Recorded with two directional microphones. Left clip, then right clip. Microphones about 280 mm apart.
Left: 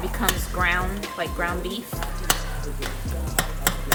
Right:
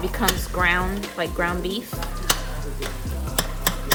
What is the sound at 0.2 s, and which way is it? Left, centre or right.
Speech, right.